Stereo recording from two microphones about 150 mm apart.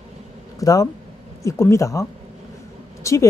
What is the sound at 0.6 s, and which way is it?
A woman's voice, 25° left (ahead or behind).